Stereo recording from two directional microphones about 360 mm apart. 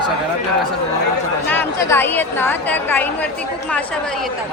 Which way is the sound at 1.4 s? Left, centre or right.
Centre.